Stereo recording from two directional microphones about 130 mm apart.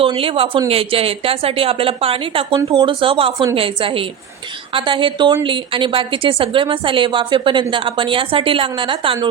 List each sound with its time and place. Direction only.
0.0 s a woman's voice: 45° right (ahead or behind)